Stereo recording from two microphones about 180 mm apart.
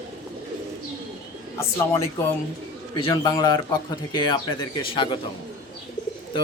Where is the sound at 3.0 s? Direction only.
25° left (ahead or behind).